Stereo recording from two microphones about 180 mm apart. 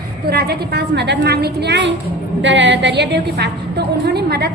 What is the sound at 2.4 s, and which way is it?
A woman's voice, 90° right.